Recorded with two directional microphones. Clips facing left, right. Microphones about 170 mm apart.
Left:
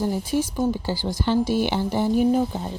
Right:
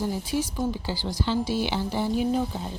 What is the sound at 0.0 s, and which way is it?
Speech, 50° left (ahead or behind).